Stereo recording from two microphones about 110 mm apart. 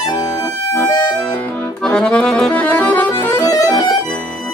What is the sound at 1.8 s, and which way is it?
Accordion, 5° left (ahead or behind).